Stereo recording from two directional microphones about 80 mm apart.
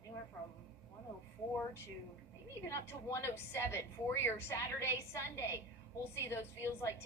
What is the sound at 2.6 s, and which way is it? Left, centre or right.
A woman's voice, left.